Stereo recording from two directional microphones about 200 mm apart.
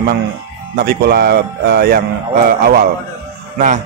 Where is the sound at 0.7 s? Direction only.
50° right (ahead or behind).